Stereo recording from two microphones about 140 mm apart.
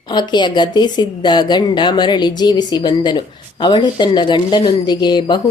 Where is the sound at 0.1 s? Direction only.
30° left (ahead or behind).